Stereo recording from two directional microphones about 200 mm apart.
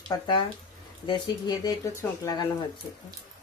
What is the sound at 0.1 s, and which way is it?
Speech, 25° left (ahead or behind).